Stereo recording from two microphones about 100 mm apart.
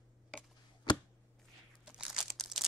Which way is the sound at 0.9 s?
50° left (ahead or behind).